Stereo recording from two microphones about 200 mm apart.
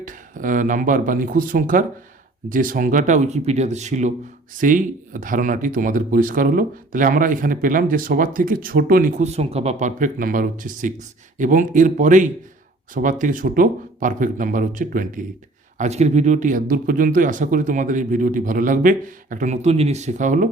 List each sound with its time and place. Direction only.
0.0 s speech: 40° right (ahead or behind)